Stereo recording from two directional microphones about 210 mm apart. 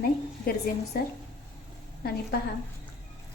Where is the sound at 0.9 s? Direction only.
45° left (ahead or behind).